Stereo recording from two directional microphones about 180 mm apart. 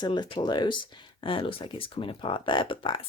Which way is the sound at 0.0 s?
25° left (ahead or behind).